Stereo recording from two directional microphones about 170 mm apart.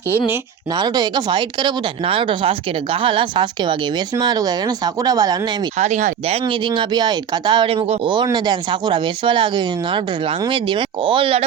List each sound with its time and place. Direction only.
0.8 s speech: 25° right (ahead or behind)
5.8 s speech: 45° right (ahead or behind)
6.7 s speech: 25° right (ahead or behind)